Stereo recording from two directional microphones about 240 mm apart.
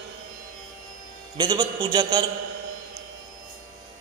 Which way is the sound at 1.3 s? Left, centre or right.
Centre.